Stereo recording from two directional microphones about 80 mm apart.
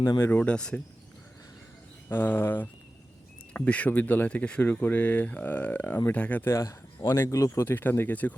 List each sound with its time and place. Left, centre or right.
0.3 s speech: centre
2.0 s speech: left
6.4 s speech: left